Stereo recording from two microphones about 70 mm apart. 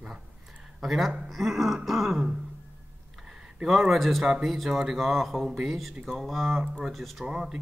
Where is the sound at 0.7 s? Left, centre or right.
Centre.